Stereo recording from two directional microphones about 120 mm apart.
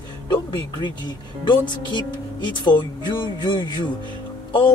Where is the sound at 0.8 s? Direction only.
40° left (ahead or behind).